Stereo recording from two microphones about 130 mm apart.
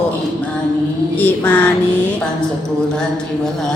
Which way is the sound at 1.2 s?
15° left (ahead or behind).